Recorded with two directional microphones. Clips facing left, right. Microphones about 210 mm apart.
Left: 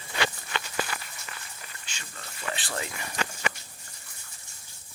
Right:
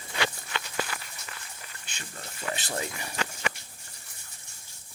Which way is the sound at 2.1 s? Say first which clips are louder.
Right 1 dB; 40° right (ahead or behind).